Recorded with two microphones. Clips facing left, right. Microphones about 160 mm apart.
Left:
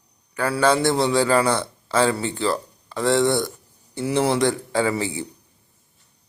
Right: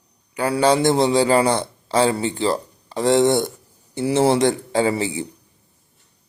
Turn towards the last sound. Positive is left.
turn(degrees=-20)  # may be behind; listen again after turning